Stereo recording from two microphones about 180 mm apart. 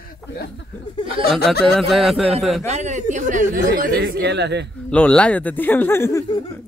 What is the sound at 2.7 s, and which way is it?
Speech, 40° right (ahead or behind).